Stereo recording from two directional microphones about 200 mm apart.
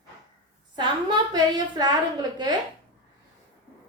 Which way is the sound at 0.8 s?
20° right (ahead or behind).